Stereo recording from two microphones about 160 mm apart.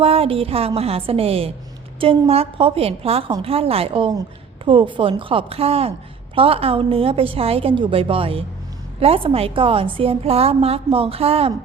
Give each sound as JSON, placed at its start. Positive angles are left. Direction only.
{"t": 0.0, "sound": "a woman's voice", "side_deg": -35}